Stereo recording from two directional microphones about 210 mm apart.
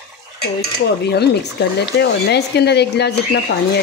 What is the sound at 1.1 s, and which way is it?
Speech, 50° left (ahead or behind).